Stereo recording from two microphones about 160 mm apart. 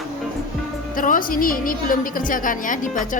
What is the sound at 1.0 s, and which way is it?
A woman's voice, 60° left (ahead or behind).